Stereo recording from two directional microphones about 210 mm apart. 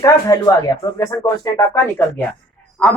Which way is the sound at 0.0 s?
15° left (ahead or behind).